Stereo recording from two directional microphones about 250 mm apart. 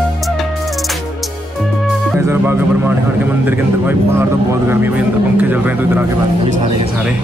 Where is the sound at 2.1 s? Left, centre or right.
Centre.